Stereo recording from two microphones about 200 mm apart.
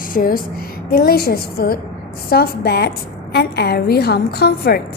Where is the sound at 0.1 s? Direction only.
45° left (ahead or behind).